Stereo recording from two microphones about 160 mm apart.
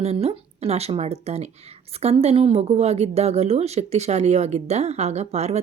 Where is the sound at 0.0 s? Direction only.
40° right (ahead or behind).